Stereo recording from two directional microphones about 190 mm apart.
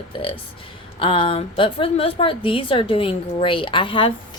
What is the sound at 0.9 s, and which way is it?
A woman's voice, 25° left (ahead or behind).